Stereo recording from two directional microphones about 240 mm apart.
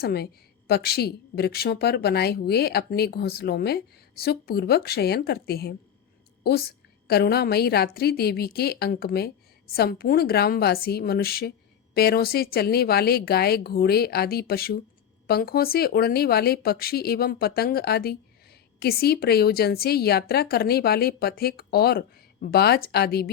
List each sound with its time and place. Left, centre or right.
0.0 s a woman's voice: left